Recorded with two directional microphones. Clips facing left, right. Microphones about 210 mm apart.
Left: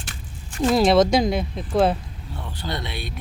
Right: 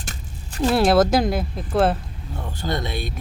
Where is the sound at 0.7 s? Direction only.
5° right (ahead or behind).